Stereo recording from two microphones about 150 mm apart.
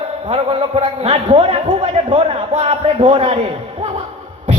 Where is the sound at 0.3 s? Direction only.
35° right (ahead or behind).